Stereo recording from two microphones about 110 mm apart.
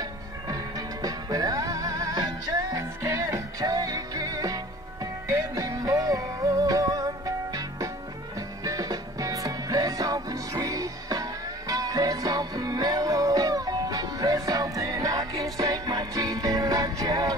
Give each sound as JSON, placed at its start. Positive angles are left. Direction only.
{"t": 0.0, "sound": "music", "side_deg": -35}